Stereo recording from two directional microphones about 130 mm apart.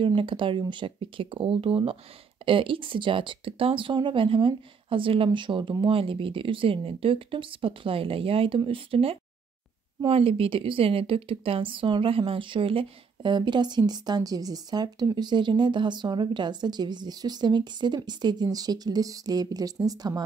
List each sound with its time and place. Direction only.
0.0 s a woman's voice: 40° right (ahead or behind)